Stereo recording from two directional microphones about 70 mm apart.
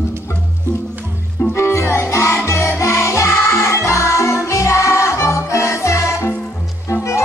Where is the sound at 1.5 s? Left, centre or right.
Left.